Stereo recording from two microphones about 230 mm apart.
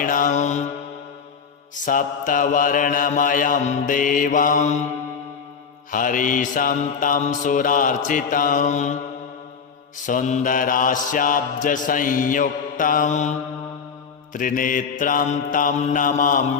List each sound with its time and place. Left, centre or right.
0.0 s mantra: left
1.8 s mantra: left
5.9 s mantra: left
10.1 s mantra: left
14.3 s mantra: left